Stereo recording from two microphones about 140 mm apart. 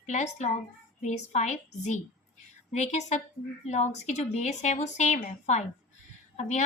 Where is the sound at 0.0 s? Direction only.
55° left (ahead or behind).